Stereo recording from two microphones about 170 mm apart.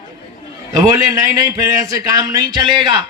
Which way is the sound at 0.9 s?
20° right (ahead or behind).